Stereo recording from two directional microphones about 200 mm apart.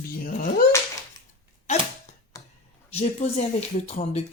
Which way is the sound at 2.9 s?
30° left (ahead or behind).